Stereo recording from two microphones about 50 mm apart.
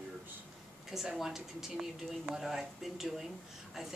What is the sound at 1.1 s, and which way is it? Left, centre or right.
Speech, centre.